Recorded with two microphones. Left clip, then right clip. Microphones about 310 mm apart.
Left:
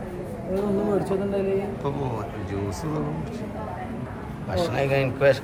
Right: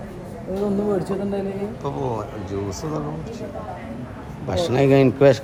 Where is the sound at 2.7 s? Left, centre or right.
Centre.